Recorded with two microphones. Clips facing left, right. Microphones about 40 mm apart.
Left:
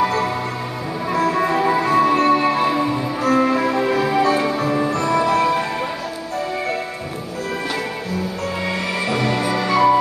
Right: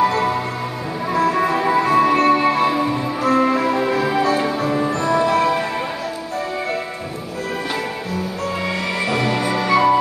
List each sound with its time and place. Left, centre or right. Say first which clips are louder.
0.0 s music: right 2 dB; centre
8.6 s music: even; centre